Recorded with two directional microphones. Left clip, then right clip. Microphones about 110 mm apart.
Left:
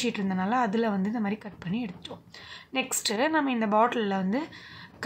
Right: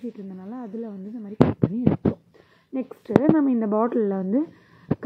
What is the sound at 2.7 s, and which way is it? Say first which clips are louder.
A woman's voice: right 6 dB; 25° right (ahead or behind).